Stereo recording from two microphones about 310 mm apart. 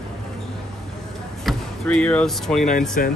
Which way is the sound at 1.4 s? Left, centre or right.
Centre.